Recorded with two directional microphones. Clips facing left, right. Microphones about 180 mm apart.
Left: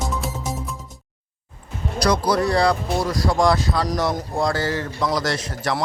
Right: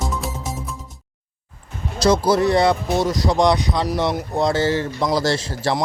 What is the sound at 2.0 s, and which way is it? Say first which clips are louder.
A man's voice: right 3 dB; 25° right (ahead or behind).